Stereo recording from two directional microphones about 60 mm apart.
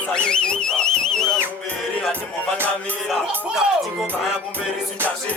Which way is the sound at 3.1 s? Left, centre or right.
Centre.